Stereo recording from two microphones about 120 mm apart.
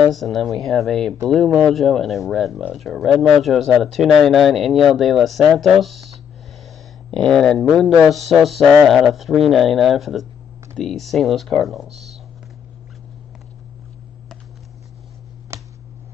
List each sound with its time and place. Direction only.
0.1 s speech: centre (ahead or behind)
11.9 s speech: 65° right (ahead or behind)
15.5 s a sound: 25° right (ahead or behind)